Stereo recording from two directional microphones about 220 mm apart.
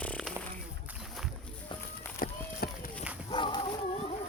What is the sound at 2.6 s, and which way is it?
Run, 45° left (ahead or behind).